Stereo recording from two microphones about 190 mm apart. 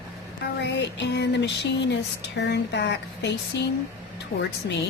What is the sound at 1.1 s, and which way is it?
A woman's voice, 65° left (ahead or behind).